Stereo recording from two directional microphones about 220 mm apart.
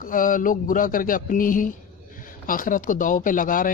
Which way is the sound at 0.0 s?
40° left (ahead or behind).